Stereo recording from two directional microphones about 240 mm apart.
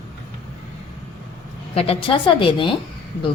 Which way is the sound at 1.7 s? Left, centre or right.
Left.